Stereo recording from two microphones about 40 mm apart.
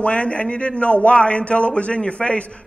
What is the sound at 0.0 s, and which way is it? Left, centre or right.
Speech, left.